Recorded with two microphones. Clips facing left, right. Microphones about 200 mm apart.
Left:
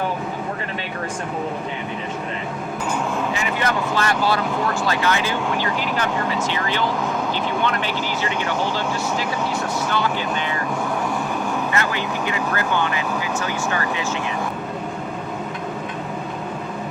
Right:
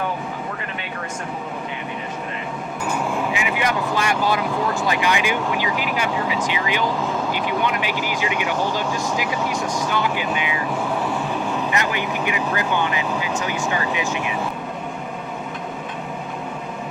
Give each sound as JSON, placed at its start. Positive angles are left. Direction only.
{"t": 3.3, "sound": "vehicle", "side_deg": -10}
{"t": 4.3, "sound": "speech", "side_deg": -20}
{"t": 11.7, "sound": "speech", "side_deg": -15}